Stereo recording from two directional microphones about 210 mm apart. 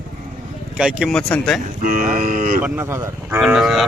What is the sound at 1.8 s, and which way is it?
Speech, 40° right (ahead or behind).